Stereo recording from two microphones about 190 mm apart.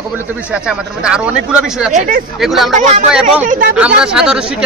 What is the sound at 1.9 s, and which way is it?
Speech, 45° right (ahead or behind).